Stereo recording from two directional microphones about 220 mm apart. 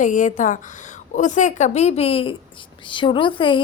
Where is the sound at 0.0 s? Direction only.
35° left (ahead or behind).